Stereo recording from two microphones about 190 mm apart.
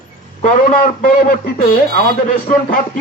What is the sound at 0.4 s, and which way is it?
A man's voice, 45° left (ahead or behind).